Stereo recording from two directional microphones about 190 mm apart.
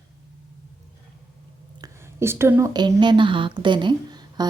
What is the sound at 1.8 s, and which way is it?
A woman's voice, 15° right (ahead or behind).